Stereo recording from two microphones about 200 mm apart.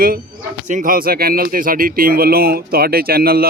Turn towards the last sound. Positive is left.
turn(degrees=-50)  # may be behind; listen again after turning